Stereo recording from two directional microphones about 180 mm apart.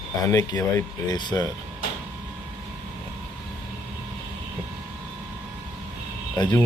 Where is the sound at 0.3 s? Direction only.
20° left (ahead or behind).